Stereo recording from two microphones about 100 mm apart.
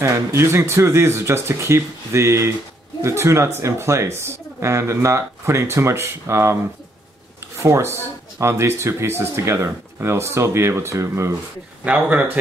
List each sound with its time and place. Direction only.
0.0 s speech: 30° right (ahead or behind)
7.6 s speech: 25° right (ahead or behind)
11.8 s a man's voice: 15° right (ahead or behind)